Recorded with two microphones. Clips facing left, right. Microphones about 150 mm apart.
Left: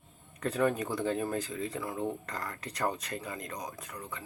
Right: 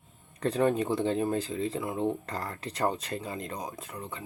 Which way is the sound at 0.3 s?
30° right (ahead or behind).